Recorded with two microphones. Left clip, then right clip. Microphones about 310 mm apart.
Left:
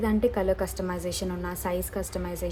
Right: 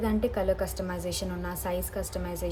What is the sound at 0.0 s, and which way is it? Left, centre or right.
A woman's voice, centre.